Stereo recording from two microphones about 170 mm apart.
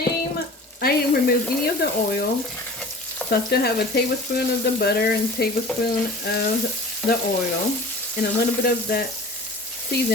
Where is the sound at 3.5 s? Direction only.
70° left (ahead or behind).